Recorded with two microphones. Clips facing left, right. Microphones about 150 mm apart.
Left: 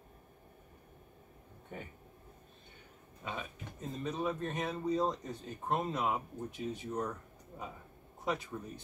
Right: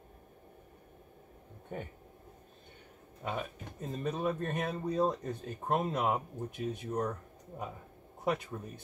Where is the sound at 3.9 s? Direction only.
55° right (ahead or behind).